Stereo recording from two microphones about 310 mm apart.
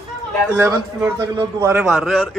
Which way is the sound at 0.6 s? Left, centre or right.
Centre.